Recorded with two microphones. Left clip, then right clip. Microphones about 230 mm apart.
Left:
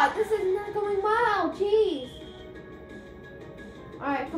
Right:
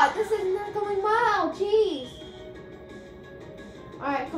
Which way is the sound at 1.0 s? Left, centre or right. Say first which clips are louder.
Right 2 dB; centre.